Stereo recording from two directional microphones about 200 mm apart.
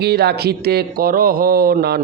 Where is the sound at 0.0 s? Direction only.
55° right (ahead or behind).